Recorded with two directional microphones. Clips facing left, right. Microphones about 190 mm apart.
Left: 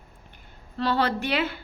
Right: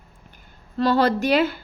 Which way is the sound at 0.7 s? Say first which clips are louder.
Right 6 dB; 40° right (ahead or behind).